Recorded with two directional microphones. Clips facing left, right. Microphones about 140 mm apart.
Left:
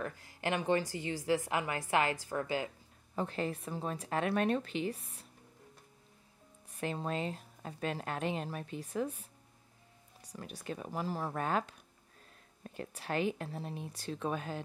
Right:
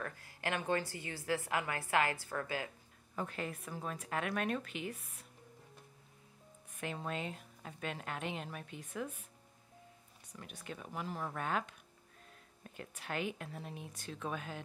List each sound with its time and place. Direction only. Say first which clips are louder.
0.0 s a woman's voice: left 4 dB; 20° left (ahead or behind)
6.7 s a woman's voice: left 4 dB; 35° left (ahead or behind)
10.2 s a woman's voice: left 6 dB; 35° left (ahead or behind)